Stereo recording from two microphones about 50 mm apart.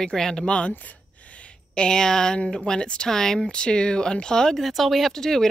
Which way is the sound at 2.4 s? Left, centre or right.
Centre.